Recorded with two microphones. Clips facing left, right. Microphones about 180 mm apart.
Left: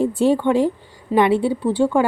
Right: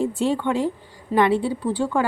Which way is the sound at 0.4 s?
30° left (ahead or behind).